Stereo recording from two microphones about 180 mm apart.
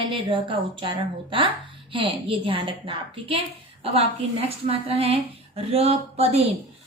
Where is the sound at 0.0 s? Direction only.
30° right (ahead or behind).